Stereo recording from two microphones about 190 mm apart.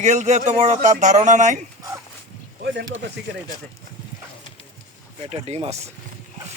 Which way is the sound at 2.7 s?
90° right.